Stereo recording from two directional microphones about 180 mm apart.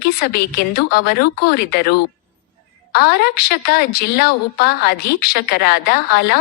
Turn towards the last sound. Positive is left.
turn(degrees=60)  # may be behind; listen again after turning